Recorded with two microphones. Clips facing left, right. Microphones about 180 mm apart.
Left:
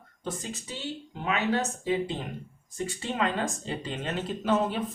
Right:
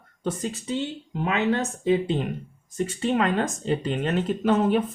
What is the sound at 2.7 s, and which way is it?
Speech, 60° right (ahead or behind).